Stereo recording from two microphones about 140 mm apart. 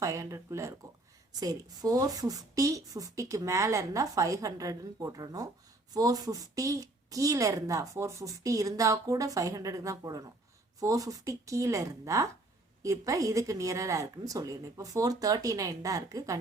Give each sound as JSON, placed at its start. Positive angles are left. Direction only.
{"t": 0.0, "sound": "a woman's voice", "side_deg": -25}